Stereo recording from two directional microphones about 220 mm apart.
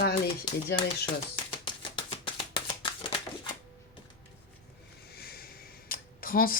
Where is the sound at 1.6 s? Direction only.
20° left (ahead or behind).